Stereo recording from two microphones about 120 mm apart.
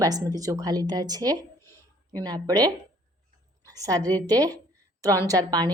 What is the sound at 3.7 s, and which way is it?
A woman's voice, 30° right (ahead or behind).